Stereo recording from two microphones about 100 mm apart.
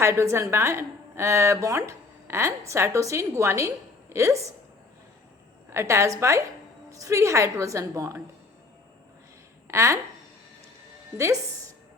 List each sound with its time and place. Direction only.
0.0 s a woman's voice: 25° right (ahead or behind)
5.7 s a woman's voice: 30° right (ahead or behind)
9.6 s a woman's voice: 30° right (ahead or behind)
11.2 s a woman's voice: 30° right (ahead or behind)